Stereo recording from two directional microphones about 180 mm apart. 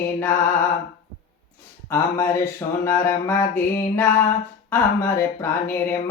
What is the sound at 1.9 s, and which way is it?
Music, 15° left (ahead or behind).